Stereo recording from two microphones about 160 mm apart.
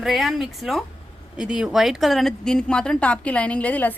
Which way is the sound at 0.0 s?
Centre (ahead or behind).